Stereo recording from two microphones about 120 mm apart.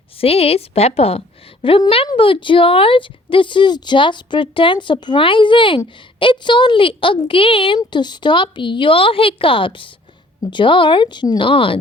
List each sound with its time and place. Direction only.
0.2 s a woman's voice: 55° left (ahead or behind)
7.8 s speech: 40° left (ahead or behind)